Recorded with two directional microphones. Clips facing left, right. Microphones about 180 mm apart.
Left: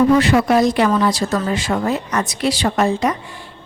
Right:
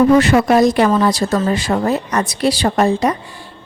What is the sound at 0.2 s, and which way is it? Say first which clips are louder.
Speech: right 2 dB; 45° right (ahead or behind).